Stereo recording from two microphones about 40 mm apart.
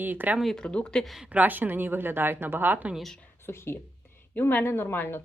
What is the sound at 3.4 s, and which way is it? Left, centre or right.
Speech, left.